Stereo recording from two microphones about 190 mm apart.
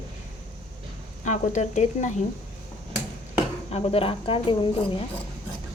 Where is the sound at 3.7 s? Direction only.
30° left (ahead or behind).